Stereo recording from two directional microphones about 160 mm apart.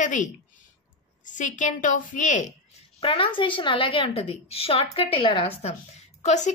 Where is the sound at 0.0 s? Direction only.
50° left (ahead or behind).